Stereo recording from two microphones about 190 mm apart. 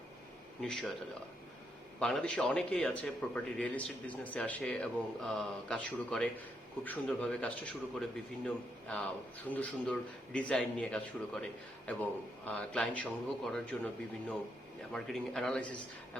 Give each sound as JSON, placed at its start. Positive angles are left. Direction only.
{"t": 0.6, "sound": "a man's voice", "side_deg": 5}
{"t": 2.0, "sound": "a man's voice", "side_deg": 5}